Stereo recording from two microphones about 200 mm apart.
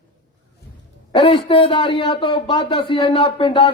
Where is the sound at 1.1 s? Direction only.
25° left (ahead or behind).